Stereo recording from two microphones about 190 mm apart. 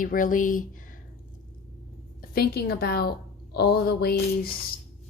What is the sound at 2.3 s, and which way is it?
Speech, 55° left (ahead or behind).